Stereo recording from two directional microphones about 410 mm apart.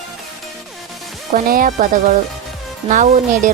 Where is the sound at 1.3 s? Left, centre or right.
Centre.